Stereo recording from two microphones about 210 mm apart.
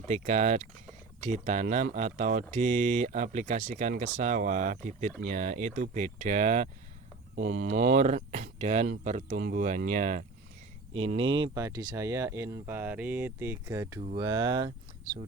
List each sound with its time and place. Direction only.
0.1 s speech: 35° right (ahead or behind); by 14.7 s 20° right (ahead or behind)